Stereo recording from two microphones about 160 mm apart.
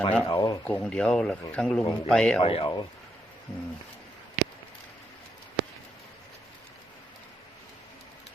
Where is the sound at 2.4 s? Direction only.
35° left (ahead or behind).